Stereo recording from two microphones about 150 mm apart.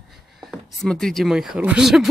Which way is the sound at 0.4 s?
Centre (ahead or behind).